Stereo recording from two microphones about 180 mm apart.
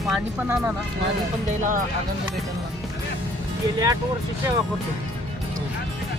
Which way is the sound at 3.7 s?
20° right (ahead or behind).